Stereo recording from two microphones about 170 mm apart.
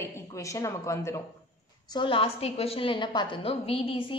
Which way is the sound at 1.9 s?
30° left (ahead or behind).